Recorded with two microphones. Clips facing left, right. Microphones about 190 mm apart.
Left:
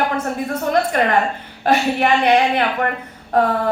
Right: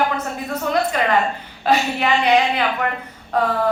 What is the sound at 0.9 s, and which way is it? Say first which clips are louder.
A woman's voice: left 2 dB; 55° left (ahead or behind).